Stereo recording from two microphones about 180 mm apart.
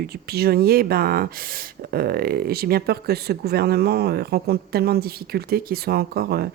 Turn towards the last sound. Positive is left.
turn(degrees=-60)  # may be behind; listen again after turning